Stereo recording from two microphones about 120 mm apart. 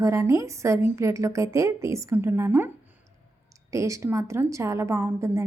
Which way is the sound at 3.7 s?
25° right (ahead or behind).